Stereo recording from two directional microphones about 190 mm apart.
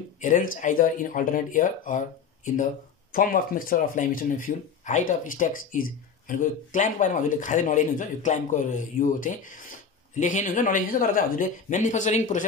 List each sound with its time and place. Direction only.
0.2 s speech: 40° left (ahead or behind)